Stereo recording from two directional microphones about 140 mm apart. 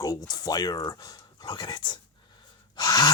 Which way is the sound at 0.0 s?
25° left (ahead or behind).